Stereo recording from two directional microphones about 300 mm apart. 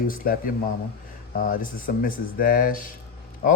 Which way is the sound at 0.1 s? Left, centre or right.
Left.